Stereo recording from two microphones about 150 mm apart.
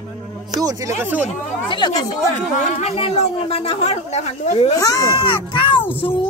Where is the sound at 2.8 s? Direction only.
45° left (ahead or behind).